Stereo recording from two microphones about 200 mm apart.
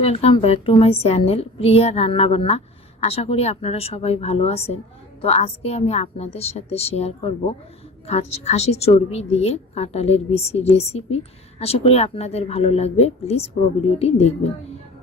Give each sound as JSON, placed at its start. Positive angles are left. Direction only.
{"t": 0.0, "sound": "a woman's voice", "side_deg": 30}